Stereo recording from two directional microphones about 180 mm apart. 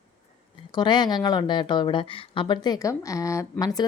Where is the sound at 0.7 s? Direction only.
25° left (ahead or behind).